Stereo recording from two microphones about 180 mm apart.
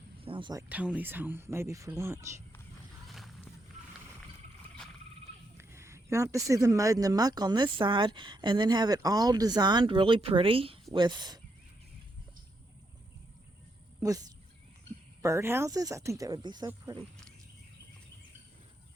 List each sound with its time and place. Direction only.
0.2 s a sound: 30° right (ahead or behind)
0.7 s speech: 10° right (ahead or behind)
5.5 s speech: 15° right (ahead or behind)
14.0 s speech: 20° right (ahead or behind)